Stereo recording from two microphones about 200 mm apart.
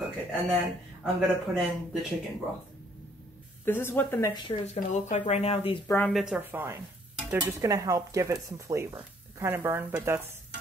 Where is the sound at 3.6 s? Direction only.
10° left (ahead or behind).